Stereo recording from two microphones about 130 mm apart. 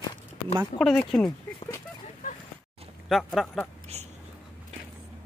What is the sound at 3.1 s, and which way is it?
Speech, centre (ahead or behind).